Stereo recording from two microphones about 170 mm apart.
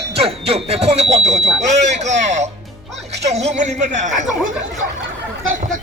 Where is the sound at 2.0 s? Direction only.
45° right (ahead or behind).